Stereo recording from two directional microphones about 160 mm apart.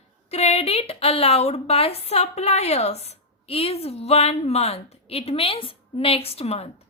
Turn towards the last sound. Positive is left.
turn(degrees=40)  # may be behind; listen again after turning